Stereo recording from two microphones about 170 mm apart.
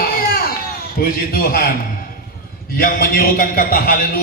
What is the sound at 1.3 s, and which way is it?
Speech, 60° left (ahead or behind).